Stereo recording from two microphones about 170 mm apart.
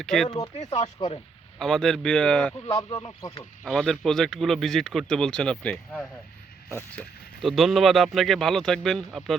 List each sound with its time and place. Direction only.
0.0 s speech: 5° left (ahead or behind)
0.3 s speech: 25° left (ahead or behind)
0.5 s speech: 35° left (ahead or behind)
1.5 s speech: 5° left (ahead or behind)
2.6 s speech: 20° left (ahead or behind)
3.6 s speech: centre (ahead or behind)
7.4 s speech: centre (ahead or behind)